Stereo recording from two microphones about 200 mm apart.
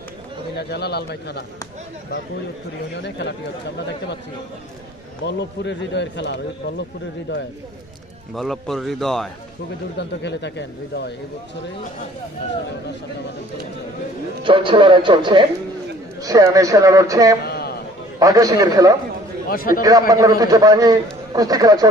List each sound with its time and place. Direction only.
0.6 s speech: 55° left (ahead or behind)
2.9 s speech: 55° left (ahead or behind)
5.2 s speech: 60° left (ahead or behind)
8.4 s a man's voice: centre (ahead or behind)
9.9 s speech: 60° left (ahead or behind)
14.4 s a man's voice: 25° right (ahead or behind)
17.5 s a sound: 50° left (ahead or behind)
18.2 s a man's voice: 20° right (ahead or behind)
19.5 s a man's voice: 45° left (ahead or behind)
19.8 s a man's voice: 20° right (ahead or behind)